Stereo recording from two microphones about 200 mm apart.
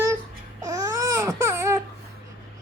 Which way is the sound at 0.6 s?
15° right (ahead or behind).